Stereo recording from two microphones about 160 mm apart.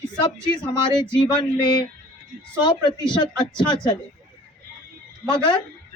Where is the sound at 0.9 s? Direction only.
30° left (ahead or behind).